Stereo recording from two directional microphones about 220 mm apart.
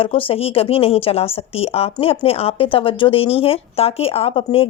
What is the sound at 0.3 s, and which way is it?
A woman's voice, 25° left (ahead or behind).